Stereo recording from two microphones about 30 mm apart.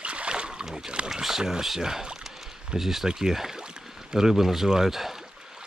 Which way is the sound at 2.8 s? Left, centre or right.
Centre.